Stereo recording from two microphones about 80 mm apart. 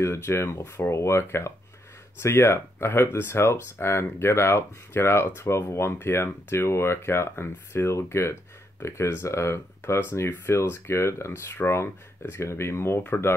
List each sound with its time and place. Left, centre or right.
0.0 s speech: left